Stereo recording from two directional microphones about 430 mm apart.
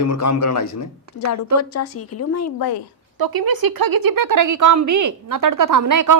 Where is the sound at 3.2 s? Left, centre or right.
Right.